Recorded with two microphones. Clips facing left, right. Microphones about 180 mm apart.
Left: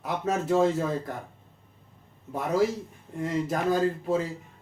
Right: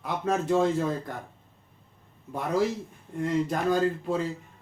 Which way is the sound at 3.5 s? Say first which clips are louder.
Even; 5° left (ahead or behind).